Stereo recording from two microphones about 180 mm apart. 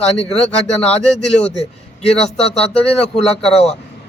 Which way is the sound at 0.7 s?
5° left (ahead or behind).